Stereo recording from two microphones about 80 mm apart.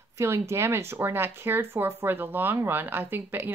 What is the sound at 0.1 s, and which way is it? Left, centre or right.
Speech, right.